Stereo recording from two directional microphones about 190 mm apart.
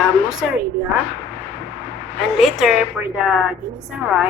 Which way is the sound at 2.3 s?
Centre (ahead or behind).